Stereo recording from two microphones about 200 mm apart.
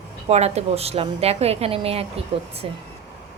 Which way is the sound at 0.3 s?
30° right (ahead or behind).